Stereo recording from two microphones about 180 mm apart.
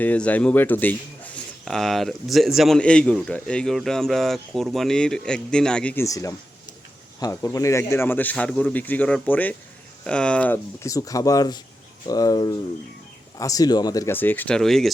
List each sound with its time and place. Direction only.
0.0 s speech: 10° left (ahead or behind)